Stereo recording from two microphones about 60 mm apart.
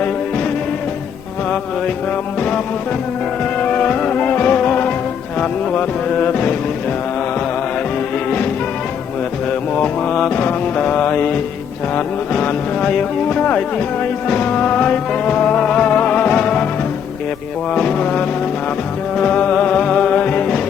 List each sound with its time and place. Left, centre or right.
3.6 s music: left
9.8 s mantra: left
11.9 s music: centre
17.7 s music: centre